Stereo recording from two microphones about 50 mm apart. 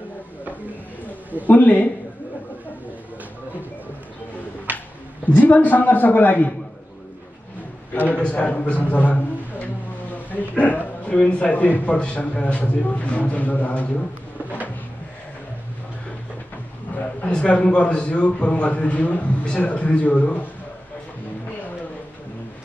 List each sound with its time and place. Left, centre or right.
1.0 s a man's voice: left
4.7 s a sound: right
5.2 s a man's voice: left
7.9 s a man's voice: left
16.9 s a sound: left
17.4 s a man's voice: left